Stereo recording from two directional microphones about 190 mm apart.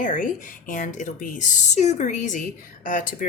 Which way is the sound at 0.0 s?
40° left (ahead or behind).